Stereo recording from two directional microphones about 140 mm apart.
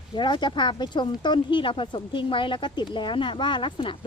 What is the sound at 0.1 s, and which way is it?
Speech, 35° left (ahead or behind).